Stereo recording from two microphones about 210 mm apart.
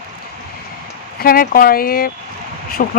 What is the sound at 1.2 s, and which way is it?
Speech, 45° left (ahead or behind).